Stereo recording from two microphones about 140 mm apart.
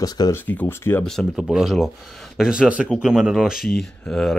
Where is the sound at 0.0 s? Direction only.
25° left (ahead or behind).